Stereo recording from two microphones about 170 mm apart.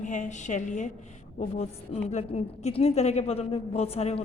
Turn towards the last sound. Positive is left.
turn(degrees=35)  # may be behind; listen again after turning